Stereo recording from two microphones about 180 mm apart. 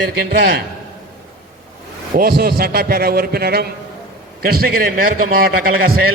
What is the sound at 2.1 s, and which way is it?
A man's voice, 55° right (ahead or behind).